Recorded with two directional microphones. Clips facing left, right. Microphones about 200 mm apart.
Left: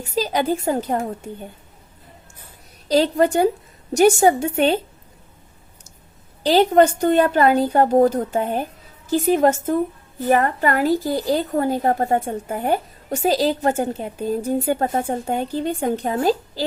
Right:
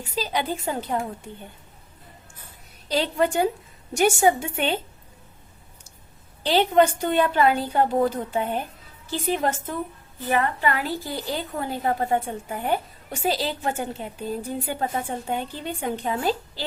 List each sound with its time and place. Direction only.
0.2 s a woman's voice: 45° left (ahead or behind)
2.9 s a woman's voice: 40° left (ahead or behind)
6.4 s a woman's voice: 40° left (ahead or behind)